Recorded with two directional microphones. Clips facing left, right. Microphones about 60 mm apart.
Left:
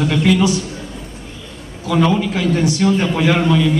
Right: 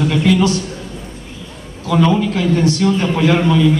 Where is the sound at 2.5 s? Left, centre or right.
Centre.